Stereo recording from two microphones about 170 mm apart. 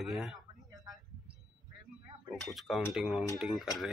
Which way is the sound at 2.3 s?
Centre (ahead or behind).